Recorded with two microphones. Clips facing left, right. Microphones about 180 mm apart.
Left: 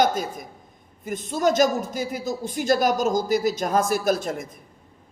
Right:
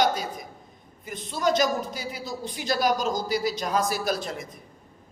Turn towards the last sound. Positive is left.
turn(degrees=50)  # may be behind; listen again after turning